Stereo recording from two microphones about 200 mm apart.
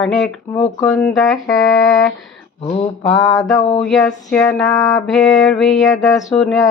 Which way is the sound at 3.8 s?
5° left (ahead or behind).